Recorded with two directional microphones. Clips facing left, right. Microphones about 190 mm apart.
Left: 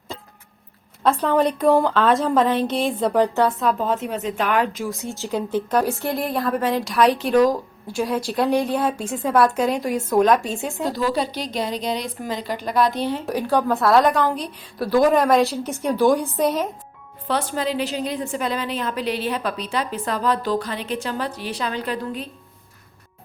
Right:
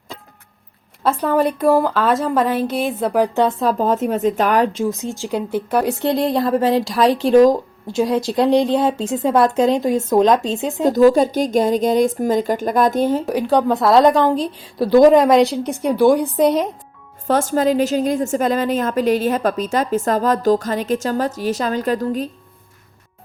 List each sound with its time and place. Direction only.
1.0 s a woman's voice: 10° right (ahead or behind)
3.4 s a woman's voice: 30° right (ahead or behind)
10.9 s a woman's voice: 45° right (ahead or behind)
13.3 s a woman's voice: 15° right (ahead or behind)
17.2 s a woman's voice: 45° right (ahead or behind)